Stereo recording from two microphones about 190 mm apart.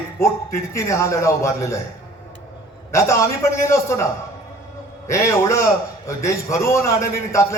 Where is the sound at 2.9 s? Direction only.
15° left (ahead or behind).